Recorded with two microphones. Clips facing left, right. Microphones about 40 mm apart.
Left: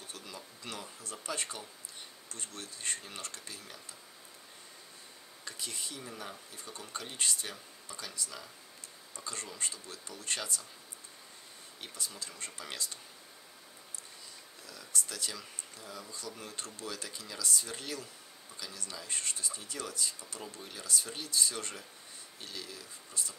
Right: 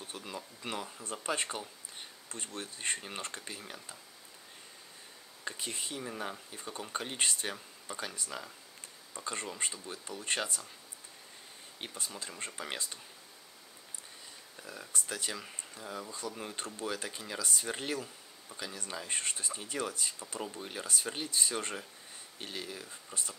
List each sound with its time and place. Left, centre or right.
0.0 s speech: right
5.4 s speech: right
11.8 s speech: right
14.6 s speech: right